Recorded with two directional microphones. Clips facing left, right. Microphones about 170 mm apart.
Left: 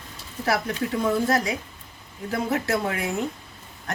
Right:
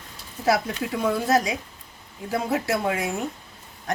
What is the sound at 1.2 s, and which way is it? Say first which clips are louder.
A woman's voice: right 2 dB; 20° right (ahead or behind).